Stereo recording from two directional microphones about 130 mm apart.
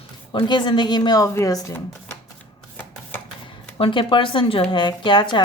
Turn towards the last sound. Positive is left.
turn(degrees=40)  # may be behind; listen again after turning